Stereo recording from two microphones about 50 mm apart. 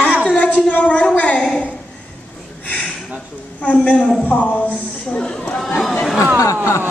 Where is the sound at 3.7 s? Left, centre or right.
Left.